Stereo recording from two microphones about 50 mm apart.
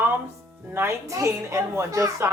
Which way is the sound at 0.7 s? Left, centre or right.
Right.